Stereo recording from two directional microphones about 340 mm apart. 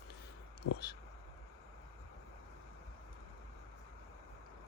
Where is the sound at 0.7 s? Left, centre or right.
Left.